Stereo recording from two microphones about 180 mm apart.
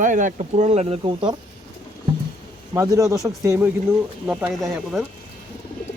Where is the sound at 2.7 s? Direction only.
20° right (ahead or behind); by 5.0 s centre (ahead or behind).